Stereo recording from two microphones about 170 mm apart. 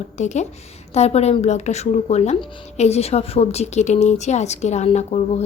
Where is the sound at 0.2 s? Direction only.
45° left (ahead or behind).